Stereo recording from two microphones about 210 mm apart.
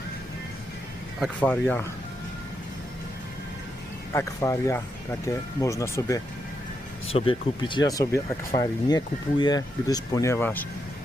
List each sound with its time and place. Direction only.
1.2 s speech: 10° left (ahead or behind)
4.1 s speech: 15° left (ahead or behind)
7.1 s speech: 25° left (ahead or behind); by 10.7 s 10° left (ahead or behind)